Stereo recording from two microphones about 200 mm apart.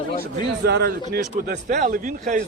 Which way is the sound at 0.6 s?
55° right (ahead or behind).